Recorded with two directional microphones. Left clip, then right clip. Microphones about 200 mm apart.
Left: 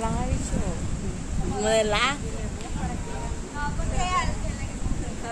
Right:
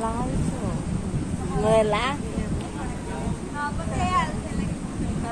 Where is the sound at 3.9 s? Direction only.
Centre (ahead or behind).